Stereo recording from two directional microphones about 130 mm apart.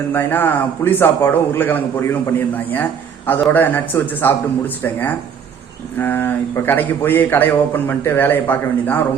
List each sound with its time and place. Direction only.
0.1 s a man's voice: 15° left (ahead or behind)